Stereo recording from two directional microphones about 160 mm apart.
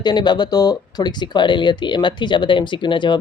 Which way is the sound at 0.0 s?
25° left (ahead or behind).